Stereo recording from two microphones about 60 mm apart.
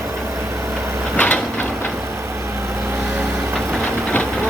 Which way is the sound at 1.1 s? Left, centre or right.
Left.